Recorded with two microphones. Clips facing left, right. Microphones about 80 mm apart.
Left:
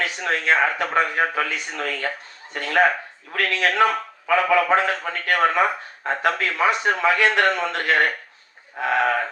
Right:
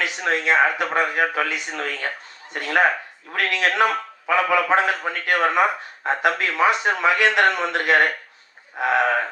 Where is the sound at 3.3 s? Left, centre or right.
Right.